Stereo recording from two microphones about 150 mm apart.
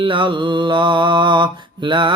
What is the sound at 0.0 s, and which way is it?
Mantra, 35° right (ahead or behind).